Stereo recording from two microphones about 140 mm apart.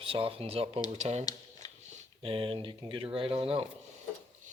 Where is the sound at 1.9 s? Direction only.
40° right (ahead or behind).